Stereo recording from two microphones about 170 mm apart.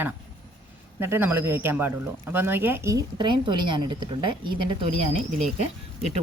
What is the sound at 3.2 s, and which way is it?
A woman's voice, 25° right (ahead or behind).